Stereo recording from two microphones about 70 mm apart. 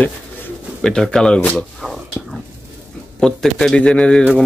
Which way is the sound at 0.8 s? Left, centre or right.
Centre.